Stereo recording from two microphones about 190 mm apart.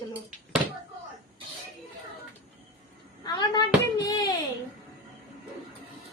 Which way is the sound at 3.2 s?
20° left (ahead or behind).